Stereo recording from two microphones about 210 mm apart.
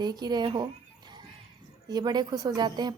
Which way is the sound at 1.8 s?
20° right (ahead or behind).